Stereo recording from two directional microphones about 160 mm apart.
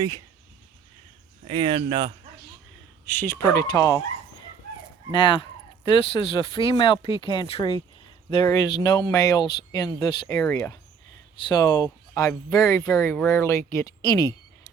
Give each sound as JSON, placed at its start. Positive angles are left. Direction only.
{"t": 1.5, "sound": "speech", "side_deg": -30}
{"t": 3.1, "sound": "speech", "side_deg": 15}
{"t": 5.1, "sound": "speech", "side_deg": 30}
{"t": 10.4, "sound": "speech", "side_deg": 10}
{"t": 11.3, "sound": "speech", "side_deg": 25}